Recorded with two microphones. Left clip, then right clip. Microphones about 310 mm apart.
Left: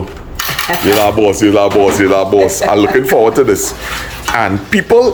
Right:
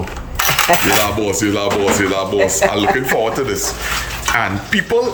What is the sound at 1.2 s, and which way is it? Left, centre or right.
Speech, centre.